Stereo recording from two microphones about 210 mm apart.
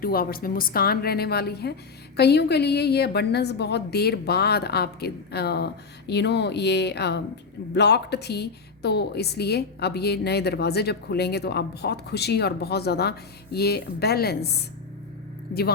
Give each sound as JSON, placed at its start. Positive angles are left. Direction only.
{"t": 0.0, "sound": "a woman's voice", "side_deg": 45}